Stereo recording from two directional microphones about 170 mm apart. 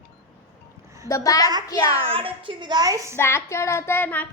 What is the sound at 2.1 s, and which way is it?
A woman's voice, 35° right (ahead or behind).